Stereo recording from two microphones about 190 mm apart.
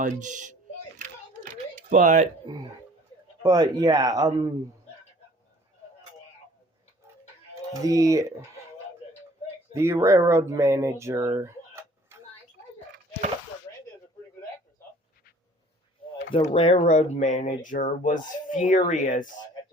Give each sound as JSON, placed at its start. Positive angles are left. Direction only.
{"t": 0.0, "sound": "speech", "side_deg": -40}
{"t": 1.7, "sound": "speech", "side_deg": -45}
{"t": 3.4, "sound": "speech", "side_deg": -20}
{"t": 7.7, "sound": "speech", "side_deg": -15}
{"t": 9.7, "sound": "speech", "side_deg": -15}
{"t": 16.3, "sound": "speech", "side_deg": 30}